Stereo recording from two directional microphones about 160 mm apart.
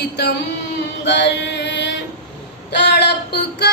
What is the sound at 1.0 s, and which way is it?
Chant, 90° left.